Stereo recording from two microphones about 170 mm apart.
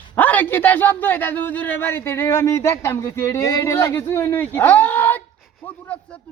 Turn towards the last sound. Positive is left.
turn(degrees=10)  # may be behind; listen again after turning